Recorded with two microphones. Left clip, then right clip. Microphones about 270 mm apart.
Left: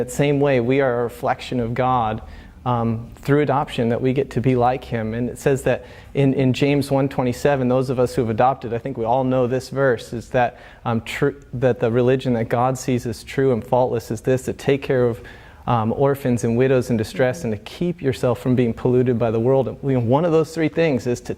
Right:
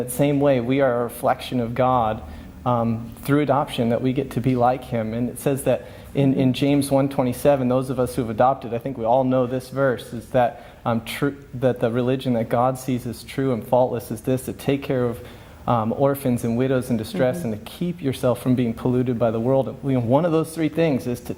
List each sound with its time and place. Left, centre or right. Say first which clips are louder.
0.2 s speech: left 1 dB; left